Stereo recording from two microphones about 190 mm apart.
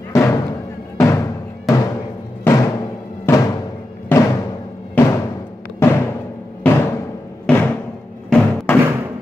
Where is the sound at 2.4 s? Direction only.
20° left (ahead or behind).